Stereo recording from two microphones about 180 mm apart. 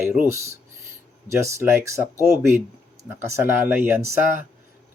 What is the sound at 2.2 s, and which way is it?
Speech, 5° right (ahead or behind).